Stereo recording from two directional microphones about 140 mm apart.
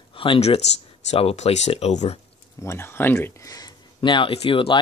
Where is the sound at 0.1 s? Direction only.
40° left (ahead or behind).